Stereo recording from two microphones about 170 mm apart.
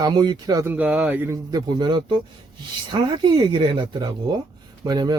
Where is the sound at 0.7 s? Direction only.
10° right (ahead or behind).